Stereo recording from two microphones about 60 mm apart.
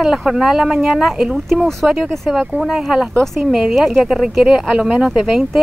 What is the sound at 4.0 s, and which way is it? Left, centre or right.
Speech, centre.